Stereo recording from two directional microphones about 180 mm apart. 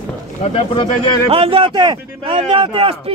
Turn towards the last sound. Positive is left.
turn(degrees=-30)  # may be behind; listen again after turning